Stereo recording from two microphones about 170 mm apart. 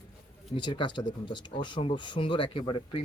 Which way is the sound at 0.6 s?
25° left (ahead or behind).